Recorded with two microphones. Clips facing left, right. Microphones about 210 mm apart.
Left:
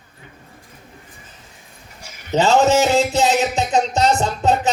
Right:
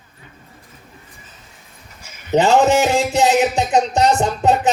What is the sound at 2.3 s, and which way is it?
A man's voice, 20° right (ahead or behind).